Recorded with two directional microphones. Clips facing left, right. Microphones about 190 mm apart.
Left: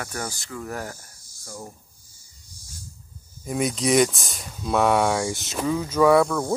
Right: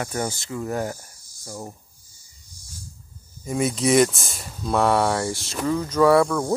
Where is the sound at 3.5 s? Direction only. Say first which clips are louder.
Right 2 dB; centre (ahead or behind).